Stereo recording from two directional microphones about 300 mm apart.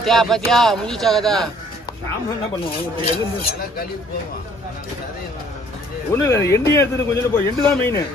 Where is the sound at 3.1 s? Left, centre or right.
Left.